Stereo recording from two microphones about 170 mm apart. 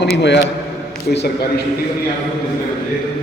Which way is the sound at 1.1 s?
75° left (ahead or behind).